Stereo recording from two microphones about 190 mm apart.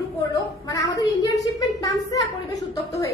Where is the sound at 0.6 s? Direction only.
20° left (ahead or behind).